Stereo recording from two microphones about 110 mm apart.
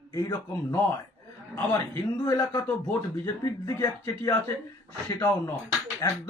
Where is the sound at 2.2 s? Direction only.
30° left (ahead or behind).